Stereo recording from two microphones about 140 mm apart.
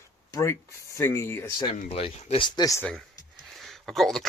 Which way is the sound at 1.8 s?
45° left (ahead or behind).